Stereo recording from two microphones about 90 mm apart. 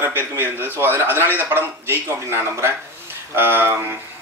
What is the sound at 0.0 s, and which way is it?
A man's voice, 25° right (ahead or behind).